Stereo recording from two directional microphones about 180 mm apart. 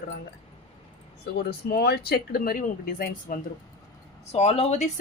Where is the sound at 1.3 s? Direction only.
60° left (ahead or behind).